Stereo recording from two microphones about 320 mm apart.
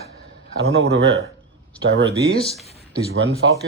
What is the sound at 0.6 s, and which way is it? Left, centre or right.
A man's voice, right.